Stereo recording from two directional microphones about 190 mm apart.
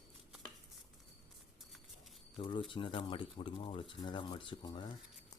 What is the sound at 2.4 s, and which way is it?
Speech, 25° left (ahead or behind).